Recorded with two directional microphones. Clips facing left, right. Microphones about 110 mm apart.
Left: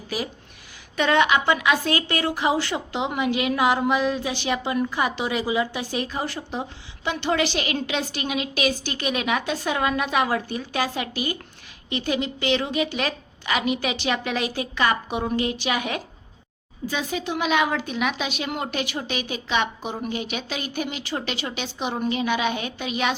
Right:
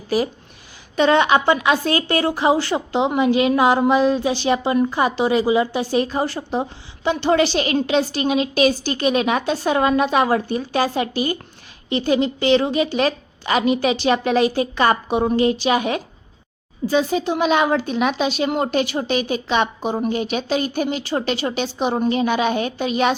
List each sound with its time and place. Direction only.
0.9 s a woman's voice: 30° right (ahead or behind)